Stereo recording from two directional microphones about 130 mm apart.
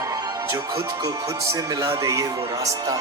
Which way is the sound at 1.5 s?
25° right (ahead or behind).